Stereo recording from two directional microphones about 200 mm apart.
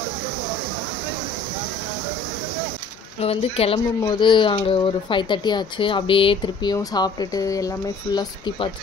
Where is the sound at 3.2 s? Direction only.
30° left (ahead or behind).